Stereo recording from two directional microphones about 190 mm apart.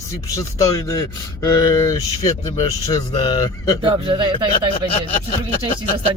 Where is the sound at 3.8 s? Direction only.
25° right (ahead or behind).